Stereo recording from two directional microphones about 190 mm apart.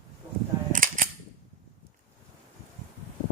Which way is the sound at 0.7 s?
45° right (ahead or behind).